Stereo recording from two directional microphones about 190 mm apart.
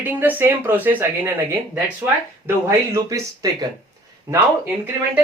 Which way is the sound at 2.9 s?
15° right (ahead or behind).